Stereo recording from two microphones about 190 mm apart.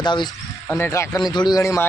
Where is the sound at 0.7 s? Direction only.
15° left (ahead or behind).